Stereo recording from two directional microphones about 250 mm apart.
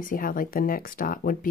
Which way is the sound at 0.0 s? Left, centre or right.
Left.